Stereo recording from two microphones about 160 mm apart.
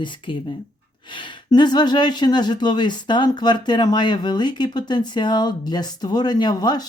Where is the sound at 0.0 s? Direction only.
30° left (ahead or behind).